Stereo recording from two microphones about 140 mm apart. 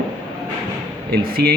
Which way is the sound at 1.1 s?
90° right.